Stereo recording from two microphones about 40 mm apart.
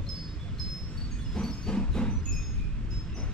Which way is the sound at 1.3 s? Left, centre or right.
Left.